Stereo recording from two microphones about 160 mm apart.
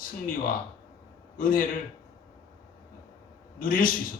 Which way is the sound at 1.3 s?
60° left (ahead or behind).